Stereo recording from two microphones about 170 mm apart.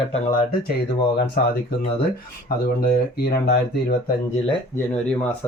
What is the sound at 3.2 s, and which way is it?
Speech, 70° left (ahead or behind).